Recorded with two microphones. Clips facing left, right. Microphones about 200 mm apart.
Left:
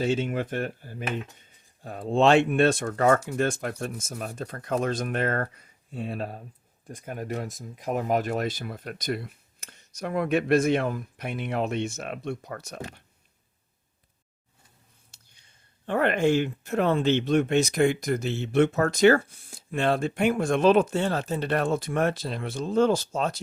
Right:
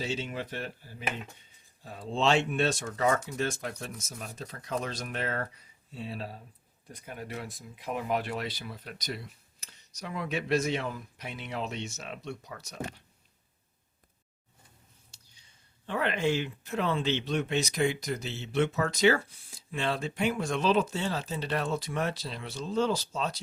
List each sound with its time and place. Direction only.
0.0 s speech: 55° left (ahead or behind)
15.1 s a sound: 55° left (ahead or behind)
15.9 s speech: 50° left (ahead or behind)